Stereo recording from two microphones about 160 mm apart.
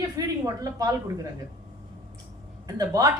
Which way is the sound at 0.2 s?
20° right (ahead or behind).